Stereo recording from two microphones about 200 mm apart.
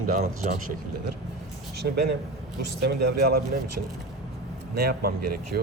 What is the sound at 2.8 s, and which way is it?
Speech, 50° right (ahead or behind).